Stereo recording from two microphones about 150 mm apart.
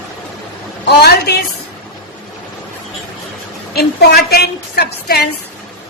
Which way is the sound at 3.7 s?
90° left.